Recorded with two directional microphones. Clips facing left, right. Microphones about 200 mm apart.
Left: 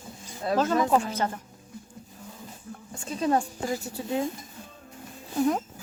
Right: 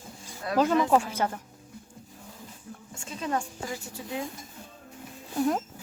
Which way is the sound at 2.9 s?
35° left (ahead or behind).